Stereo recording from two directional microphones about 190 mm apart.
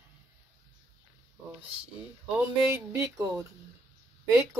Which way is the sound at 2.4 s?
15° right (ahead or behind).